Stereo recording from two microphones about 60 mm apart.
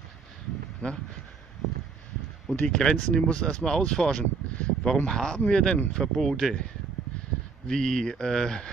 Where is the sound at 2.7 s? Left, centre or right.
Centre.